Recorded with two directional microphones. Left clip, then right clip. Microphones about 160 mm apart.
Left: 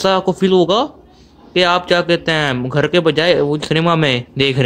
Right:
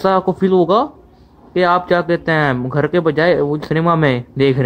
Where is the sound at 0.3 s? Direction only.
45° left (ahead or behind).